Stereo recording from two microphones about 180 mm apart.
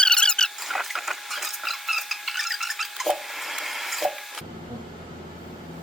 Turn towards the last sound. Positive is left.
turn(degrees=0)  # may be behind; listen again after turning